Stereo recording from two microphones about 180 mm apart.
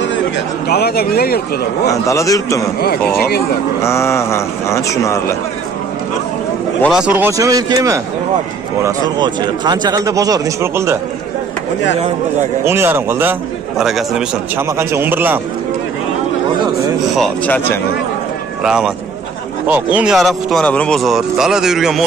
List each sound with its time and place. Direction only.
0.7 s a man's voice: 60° left (ahead or behind)
1.9 s a man's voice: 15° left (ahead or behind)
2.8 s a man's voice: 60° left (ahead or behind)
3.8 s a man's voice: 15° left (ahead or behind)
6.9 s a man's voice: 5° right (ahead or behind)
12.6 s a man's voice: 15° right (ahead or behind)
14.8 s a man's voice: 15° right (ahead or behind)
17.1 s speech: 5° left (ahead or behind)